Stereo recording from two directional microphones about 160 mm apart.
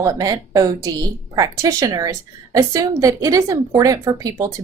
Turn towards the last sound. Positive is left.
turn(degrees=-20)  # may be behind; listen again after turning